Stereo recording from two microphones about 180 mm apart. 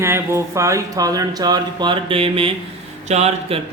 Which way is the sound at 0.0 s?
15° right (ahead or behind).